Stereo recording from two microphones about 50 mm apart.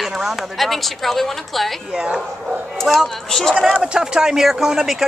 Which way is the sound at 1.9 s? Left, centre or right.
Centre.